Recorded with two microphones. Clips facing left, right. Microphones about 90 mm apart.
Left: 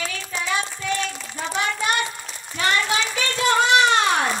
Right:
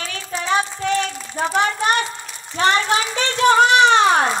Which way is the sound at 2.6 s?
30° right (ahead or behind).